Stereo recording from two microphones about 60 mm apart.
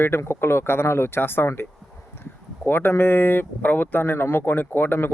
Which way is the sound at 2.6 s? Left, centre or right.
Left.